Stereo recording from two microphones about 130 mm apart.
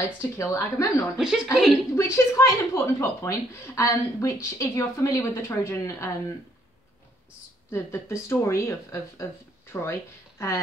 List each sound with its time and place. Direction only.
0.2 s speech: 20° left (ahead or behind)
1.1 s a woman's voice: 5° right (ahead or behind)
2.0 s speech: 25° left (ahead or behind)
7.7 s speech: 20° left (ahead or behind)